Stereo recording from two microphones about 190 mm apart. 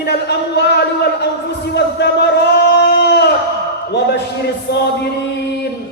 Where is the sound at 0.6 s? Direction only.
65° left (ahead or behind).